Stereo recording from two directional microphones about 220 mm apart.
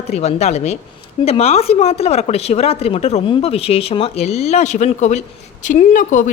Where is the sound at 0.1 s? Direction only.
30° left (ahead or behind).